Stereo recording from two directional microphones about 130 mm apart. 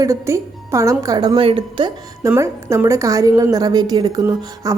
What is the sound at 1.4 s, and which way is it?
Speech, 45° right (ahead or behind).